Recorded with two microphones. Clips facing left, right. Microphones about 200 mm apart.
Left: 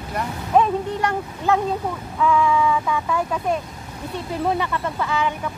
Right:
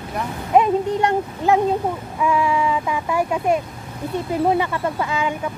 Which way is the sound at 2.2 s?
10° right (ahead or behind).